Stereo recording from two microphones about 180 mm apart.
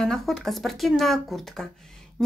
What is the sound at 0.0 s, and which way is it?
Speech, centre (ahead or behind).